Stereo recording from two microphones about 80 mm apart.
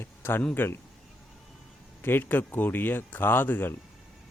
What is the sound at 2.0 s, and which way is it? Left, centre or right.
Speech, left.